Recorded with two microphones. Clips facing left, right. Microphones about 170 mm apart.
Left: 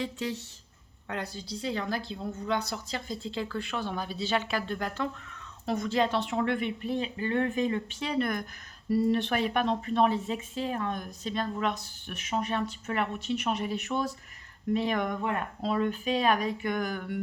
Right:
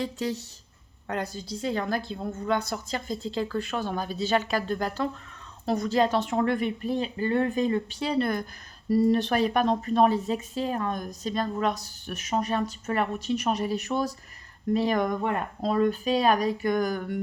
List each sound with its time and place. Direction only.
0.0 s a woman's voice: 40° right (ahead or behind)